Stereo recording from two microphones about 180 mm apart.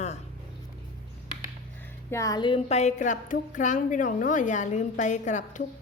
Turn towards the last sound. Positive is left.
turn(degrees=45)  # may be behind; listen again after turning